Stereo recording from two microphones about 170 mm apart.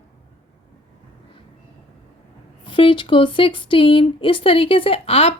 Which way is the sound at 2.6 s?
30° left (ahead or behind).